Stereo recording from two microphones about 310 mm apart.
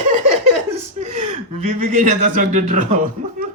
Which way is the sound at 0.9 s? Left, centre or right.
Right.